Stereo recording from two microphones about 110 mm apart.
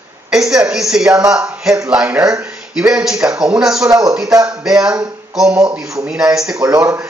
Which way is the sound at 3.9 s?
30° right (ahead or behind).